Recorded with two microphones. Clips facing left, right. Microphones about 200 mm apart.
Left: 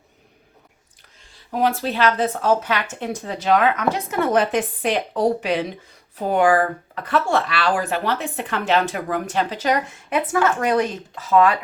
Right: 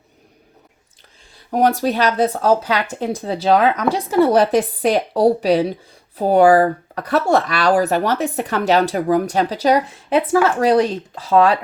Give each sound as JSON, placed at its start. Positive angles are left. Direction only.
{"t": 1.5, "sound": "speech", "side_deg": -40}